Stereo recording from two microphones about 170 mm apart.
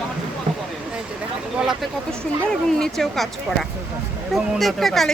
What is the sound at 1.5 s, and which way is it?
Speech, centre (ahead or behind).